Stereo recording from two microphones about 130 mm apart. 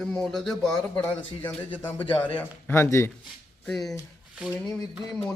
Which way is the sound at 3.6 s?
Centre (ahead or behind).